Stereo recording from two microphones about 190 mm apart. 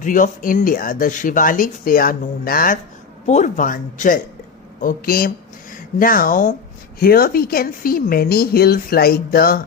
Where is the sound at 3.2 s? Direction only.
40° left (ahead or behind).